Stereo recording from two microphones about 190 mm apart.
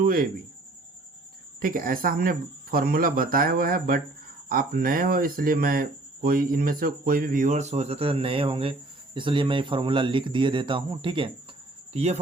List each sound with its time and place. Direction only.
0.0 s speech: 50° right (ahead or behind)
1.6 s speech: 45° right (ahead or behind)